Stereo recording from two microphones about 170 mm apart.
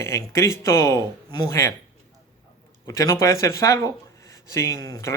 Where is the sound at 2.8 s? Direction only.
20° left (ahead or behind).